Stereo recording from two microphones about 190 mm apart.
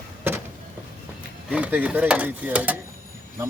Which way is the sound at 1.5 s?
10° right (ahead or behind).